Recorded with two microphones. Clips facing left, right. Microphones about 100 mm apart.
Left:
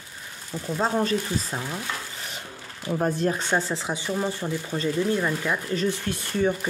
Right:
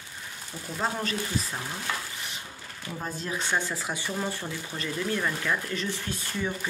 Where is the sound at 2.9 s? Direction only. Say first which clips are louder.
Left 10 dB; 55° left (ahead or behind).